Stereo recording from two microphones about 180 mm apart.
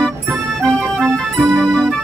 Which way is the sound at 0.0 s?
5° left (ahead or behind).